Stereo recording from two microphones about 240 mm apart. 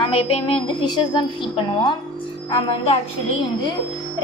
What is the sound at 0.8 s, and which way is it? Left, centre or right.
A woman's voice, centre.